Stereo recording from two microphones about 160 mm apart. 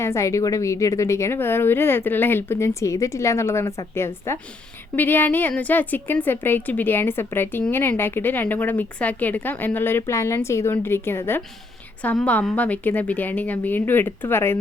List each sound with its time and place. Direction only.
0.0 s a woman's voice: 20° left (ahead or behind)